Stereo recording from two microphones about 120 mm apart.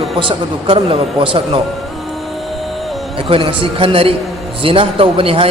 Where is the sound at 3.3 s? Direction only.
45° right (ahead or behind).